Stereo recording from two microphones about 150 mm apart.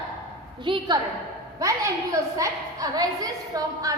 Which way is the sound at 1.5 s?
20° right (ahead or behind).